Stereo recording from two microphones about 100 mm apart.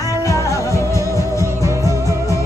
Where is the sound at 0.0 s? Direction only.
35° left (ahead or behind).